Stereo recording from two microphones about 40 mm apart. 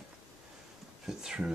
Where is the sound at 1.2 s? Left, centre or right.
Centre.